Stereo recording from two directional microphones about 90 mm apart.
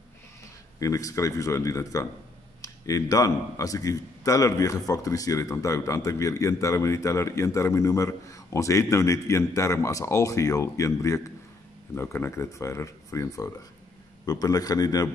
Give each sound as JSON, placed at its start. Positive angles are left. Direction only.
{"t": 0.7, "sound": "speech", "side_deg": 35}
{"t": 11.9, "sound": "a man's voice", "side_deg": 25}